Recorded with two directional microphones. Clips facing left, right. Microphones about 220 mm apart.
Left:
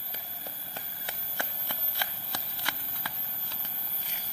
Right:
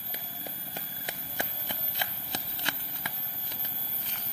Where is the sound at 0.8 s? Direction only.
20° right (ahead or behind).